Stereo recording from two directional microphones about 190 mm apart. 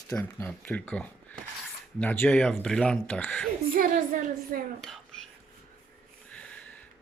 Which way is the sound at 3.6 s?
50° right (ahead or behind).